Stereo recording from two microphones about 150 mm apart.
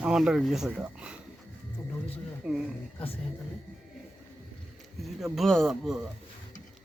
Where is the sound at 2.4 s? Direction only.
5° right (ahead or behind).